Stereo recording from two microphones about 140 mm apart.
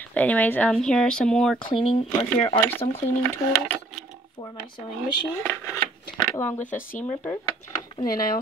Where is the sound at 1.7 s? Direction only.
40° left (ahead or behind).